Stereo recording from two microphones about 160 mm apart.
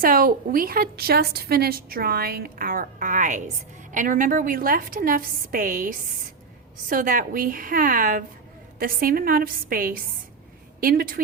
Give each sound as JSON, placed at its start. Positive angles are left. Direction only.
{"t": 0.0, "sound": "a woman's voice", "side_deg": -60}